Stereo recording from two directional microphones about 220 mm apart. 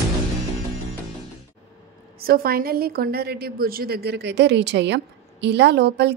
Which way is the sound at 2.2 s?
45° right (ahead or behind).